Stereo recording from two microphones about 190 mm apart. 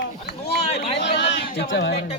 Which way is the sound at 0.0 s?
60° left (ahead or behind).